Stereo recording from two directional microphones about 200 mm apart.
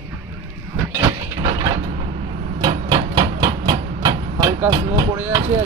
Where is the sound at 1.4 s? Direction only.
20° right (ahead or behind).